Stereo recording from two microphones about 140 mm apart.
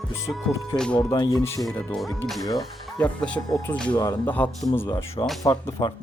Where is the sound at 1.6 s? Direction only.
Centre (ahead or behind).